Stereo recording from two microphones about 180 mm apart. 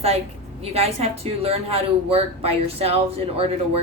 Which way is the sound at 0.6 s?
35° right (ahead or behind).